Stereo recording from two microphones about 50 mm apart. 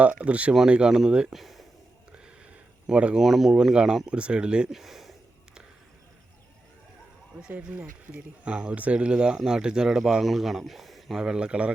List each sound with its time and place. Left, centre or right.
0.3 s speech: right
0.7 s speech: centre
1.3 s speech: centre
2.8 s speech: right
3.2 s speech: centre
4.7 s a sound: centre
7.5 s speech: right
8.4 s speech: right; by 11.2 s centre
11.2 s speech: centre